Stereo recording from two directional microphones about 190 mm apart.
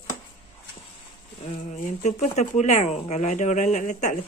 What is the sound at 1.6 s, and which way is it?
Speech, 40° left (ahead or behind).